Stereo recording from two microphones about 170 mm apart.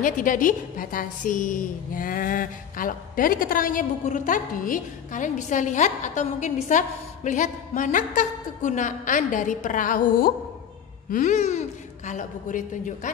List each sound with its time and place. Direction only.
0.0 s a woman's voice: 50° left (ahead or behind)